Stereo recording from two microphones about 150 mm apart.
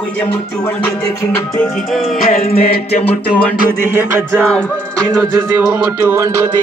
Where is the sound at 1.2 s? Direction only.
20° left (ahead or behind).